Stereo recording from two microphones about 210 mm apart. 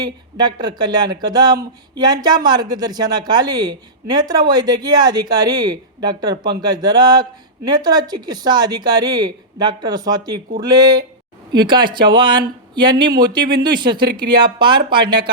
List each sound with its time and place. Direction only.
0.0 s speech: 20° right (ahead or behind)